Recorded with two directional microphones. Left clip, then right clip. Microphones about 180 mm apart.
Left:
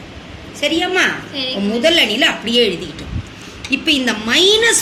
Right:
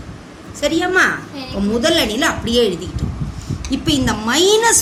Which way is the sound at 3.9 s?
55° right (ahead or behind).